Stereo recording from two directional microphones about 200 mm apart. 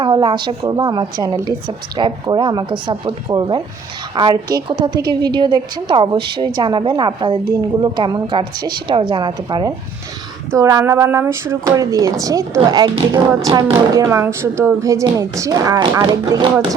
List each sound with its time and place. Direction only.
0.0 s a woman's voice: 25° right (ahead or behind)